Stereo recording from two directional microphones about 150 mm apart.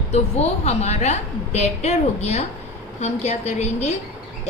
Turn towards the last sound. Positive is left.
turn(degrees=50)  # may be behind; listen again after turning